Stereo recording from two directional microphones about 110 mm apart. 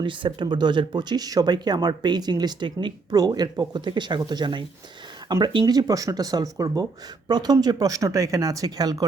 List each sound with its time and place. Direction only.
0.0 s speech: 50° right (ahead or behind)